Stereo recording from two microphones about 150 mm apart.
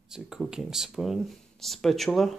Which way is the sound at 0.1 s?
5° right (ahead or behind).